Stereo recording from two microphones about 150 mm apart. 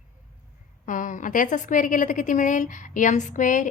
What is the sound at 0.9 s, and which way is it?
A woman's voice, 60° left (ahead or behind).